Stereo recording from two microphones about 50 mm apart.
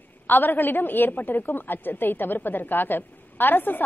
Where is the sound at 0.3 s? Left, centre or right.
Left.